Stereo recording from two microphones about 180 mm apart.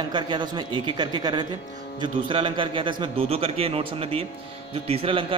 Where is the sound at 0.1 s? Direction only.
25° right (ahead or behind).